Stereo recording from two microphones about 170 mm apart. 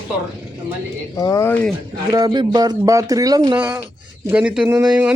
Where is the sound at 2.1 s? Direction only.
25° right (ahead or behind).